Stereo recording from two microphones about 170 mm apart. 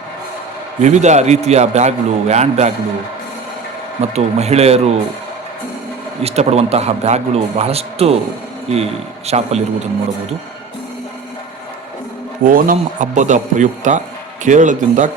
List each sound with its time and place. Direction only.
0.8 s speech: 45° right (ahead or behind)
4.1 s speech: 40° right (ahead or behind)
6.2 s speech: 40° right (ahead or behind)
12.5 s a man's voice: 55° right (ahead or behind)